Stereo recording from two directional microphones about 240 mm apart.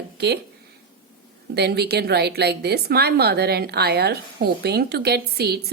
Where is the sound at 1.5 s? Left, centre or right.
Right.